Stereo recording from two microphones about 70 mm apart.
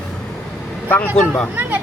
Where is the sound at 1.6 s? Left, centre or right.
Right.